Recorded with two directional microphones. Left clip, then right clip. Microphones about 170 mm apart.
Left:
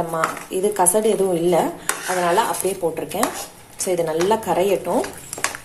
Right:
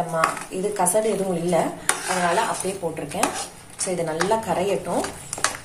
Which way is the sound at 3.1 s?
40° left (ahead or behind).